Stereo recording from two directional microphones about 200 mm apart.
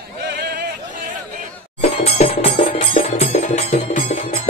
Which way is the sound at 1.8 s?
35° left (ahead or behind).